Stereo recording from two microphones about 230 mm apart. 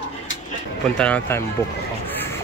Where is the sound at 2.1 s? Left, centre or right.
Centre.